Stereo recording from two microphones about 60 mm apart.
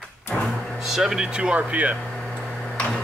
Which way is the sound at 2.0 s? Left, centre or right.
Centre.